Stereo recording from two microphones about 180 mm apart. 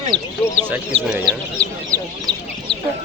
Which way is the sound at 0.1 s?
25° right (ahead or behind).